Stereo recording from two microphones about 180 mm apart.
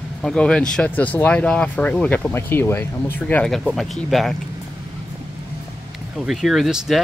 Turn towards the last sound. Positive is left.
turn(degrees=0)  # may be behind; listen again after turning